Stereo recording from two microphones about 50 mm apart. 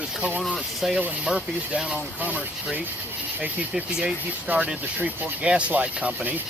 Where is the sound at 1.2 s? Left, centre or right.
Centre.